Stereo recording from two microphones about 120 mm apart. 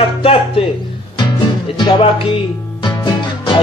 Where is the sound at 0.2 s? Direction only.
50° left (ahead or behind).